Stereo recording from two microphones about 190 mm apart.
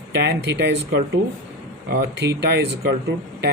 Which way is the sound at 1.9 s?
60° right (ahead or behind).